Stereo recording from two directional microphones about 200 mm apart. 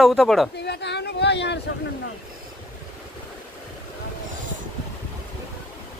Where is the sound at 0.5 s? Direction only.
55° left (ahead or behind).